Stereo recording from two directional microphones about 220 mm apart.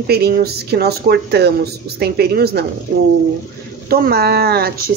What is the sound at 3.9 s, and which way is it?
Speech, 45° right (ahead or behind).